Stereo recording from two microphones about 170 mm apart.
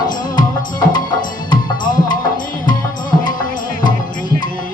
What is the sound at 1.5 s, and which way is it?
Music, 55° left (ahead or behind).